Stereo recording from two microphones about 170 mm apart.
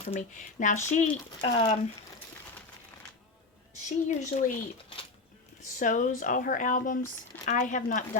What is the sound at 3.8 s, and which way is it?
Speech, 45° left (ahead or behind).